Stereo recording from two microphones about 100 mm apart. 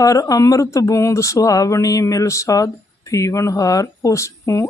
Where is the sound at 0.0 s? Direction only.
35° left (ahead or behind).